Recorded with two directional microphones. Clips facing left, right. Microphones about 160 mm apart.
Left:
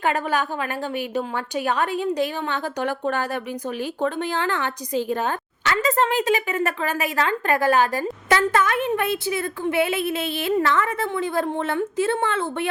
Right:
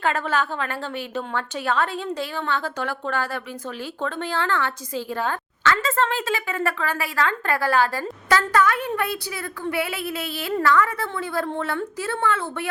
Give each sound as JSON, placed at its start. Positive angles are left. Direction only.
{"t": 0.0, "sound": "a woman's voice", "side_deg": 15}